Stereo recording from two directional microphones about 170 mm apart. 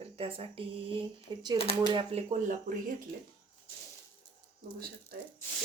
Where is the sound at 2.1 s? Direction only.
45° right (ahead or behind).